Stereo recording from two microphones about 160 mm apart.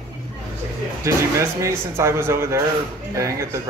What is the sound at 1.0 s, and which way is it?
Speech, 20° right (ahead or behind).